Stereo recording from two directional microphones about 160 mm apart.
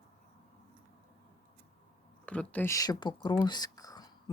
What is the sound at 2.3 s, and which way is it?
Speech, 10° left (ahead or behind).